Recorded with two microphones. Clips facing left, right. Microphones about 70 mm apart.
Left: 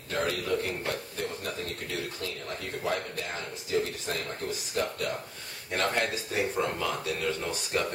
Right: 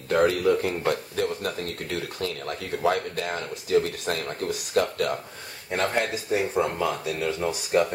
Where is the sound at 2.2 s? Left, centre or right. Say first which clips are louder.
Right 6 dB; right.